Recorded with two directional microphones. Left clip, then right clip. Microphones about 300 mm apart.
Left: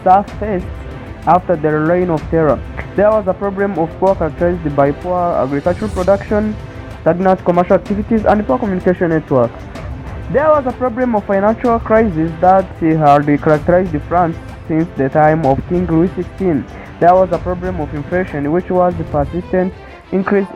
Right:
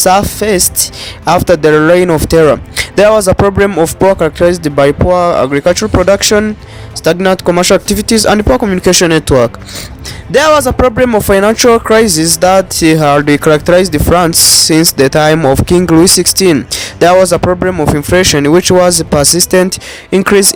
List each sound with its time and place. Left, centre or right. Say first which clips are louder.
0.0 s speech: right 3 dB; right